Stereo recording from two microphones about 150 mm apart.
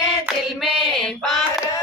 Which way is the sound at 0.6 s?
Centre (ahead or behind).